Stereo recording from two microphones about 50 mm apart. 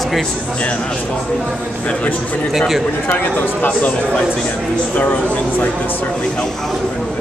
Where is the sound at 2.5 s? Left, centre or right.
Centre.